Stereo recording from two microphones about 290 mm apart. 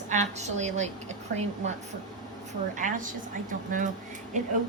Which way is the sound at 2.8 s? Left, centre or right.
Right.